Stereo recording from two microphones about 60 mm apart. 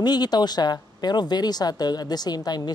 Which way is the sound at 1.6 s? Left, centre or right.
Left.